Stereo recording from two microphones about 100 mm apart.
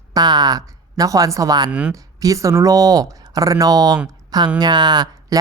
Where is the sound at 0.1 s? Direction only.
45° right (ahead or behind).